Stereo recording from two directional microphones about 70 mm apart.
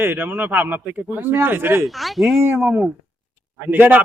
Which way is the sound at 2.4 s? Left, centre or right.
Right.